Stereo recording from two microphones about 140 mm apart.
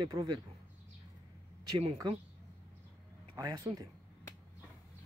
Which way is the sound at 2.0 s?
30° right (ahead or behind).